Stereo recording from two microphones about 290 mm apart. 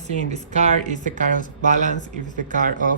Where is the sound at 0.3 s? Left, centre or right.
Right.